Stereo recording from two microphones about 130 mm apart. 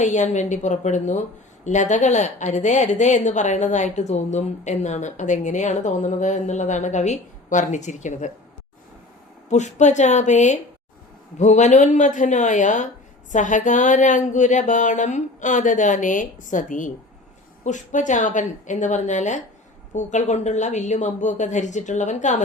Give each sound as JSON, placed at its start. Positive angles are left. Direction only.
{"t": 0.0, "sound": "a woman's voice", "side_deg": 65}
{"t": 9.5, "sound": "a woman's voice", "side_deg": 65}